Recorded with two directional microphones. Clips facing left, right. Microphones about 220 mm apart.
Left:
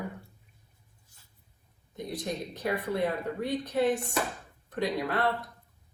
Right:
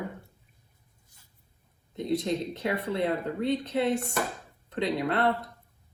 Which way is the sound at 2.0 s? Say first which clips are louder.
Right 7 dB; 25° right (ahead or behind).